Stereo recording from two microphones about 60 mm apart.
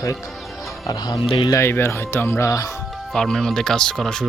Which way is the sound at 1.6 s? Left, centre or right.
Left.